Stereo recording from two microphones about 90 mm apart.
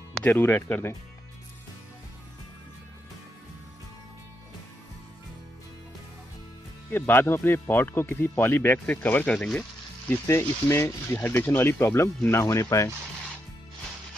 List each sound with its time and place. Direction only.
0.2 s speech: 20° left (ahead or behind)
6.9 s speech: 20° left (ahead or behind)
9.6 s speech: 25° left (ahead or behind)